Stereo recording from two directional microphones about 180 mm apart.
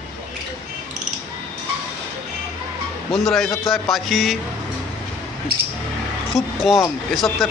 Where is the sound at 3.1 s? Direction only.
Centre (ahead or behind).